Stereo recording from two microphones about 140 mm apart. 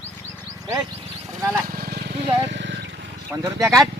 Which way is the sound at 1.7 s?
90° right.